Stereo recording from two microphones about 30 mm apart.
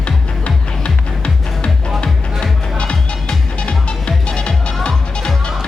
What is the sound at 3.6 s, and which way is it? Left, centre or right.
Music, left.